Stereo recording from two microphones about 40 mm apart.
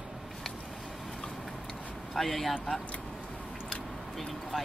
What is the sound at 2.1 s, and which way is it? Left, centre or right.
Speech, centre.